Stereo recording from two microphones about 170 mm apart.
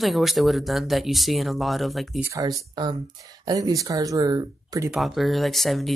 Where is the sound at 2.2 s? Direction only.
20° right (ahead or behind).